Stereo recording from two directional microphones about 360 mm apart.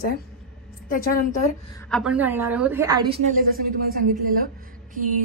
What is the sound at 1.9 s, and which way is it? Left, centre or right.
A woman's voice, centre.